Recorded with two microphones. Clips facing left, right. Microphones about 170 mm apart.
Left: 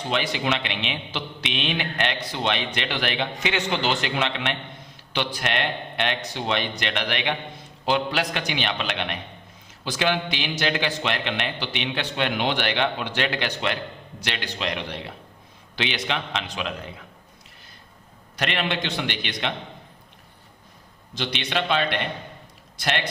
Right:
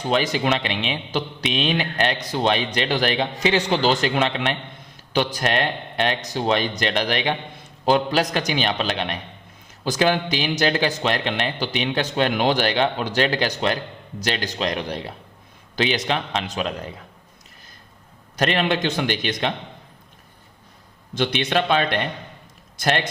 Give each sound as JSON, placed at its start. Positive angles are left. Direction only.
{"t": 0.1, "sound": "a man's voice", "side_deg": -40}
{"t": 18.3, "sound": "a man's voice", "side_deg": -40}
{"t": 21.2, "sound": "a man's voice", "side_deg": -50}